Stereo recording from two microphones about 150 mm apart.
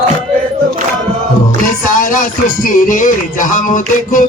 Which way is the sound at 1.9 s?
60° left (ahead or behind).